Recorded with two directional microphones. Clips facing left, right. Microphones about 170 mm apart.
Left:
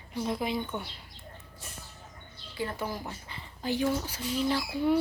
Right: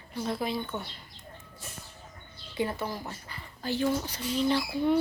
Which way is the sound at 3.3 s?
15° left (ahead or behind).